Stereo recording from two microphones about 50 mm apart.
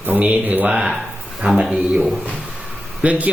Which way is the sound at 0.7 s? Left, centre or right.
Centre.